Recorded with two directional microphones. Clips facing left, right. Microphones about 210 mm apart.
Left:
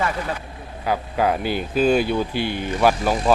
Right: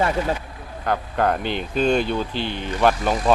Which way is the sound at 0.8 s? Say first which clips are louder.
Even; 5° left (ahead or behind).